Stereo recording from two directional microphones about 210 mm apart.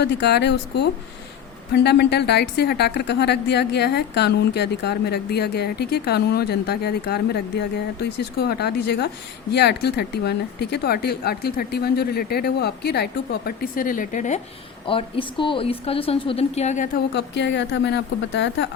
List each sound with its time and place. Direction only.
0.0 s a woman's voice: 55° left (ahead or behind); by 14.4 s 35° left (ahead or behind)
14.8 s a woman's voice: 25° left (ahead or behind)
17.2 s speech: 55° left (ahead or behind)